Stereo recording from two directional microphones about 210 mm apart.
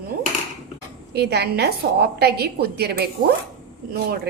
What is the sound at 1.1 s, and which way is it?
A woman's voice, 50° right (ahead or behind).